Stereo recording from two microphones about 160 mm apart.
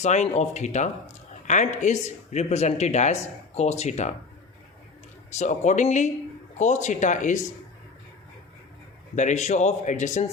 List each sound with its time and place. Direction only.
0.0 s speech: 45° left (ahead or behind)
5.3 s speech: 45° left (ahead or behind)
9.1 s speech: 45° left (ahead or behind)